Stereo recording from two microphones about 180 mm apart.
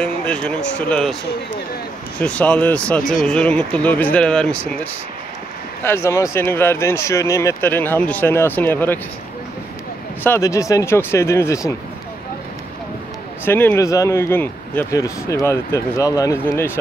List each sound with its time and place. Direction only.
0.0 s speech: 5° left (ahead or behind)
2.1 s speech: 5° left (ahead or behind)
5.9 s speech: 15° left (ahead or behind)
10.2 s speech: 15° left (ahead or behind)
13.5 s speech: 10° left (ahead or behind)